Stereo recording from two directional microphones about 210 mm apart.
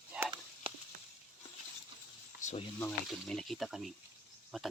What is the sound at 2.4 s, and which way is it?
Sizzle, 35° left (ahead or behind).